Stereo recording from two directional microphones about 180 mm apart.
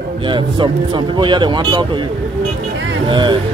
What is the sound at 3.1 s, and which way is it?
Speech, 25° right (ahead or behind).